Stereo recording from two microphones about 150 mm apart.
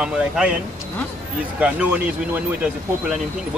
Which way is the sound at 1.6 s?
10° right (ahead or behind).